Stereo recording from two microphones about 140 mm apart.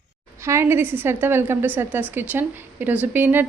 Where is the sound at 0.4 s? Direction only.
20° right (ahead or behind).